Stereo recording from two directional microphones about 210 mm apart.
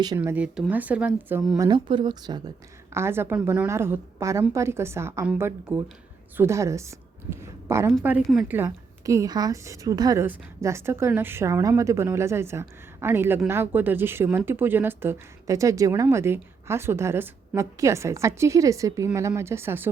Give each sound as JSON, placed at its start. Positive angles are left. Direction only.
{"t": 0.2, "sound": "a woman's voice", "side_deg": -5}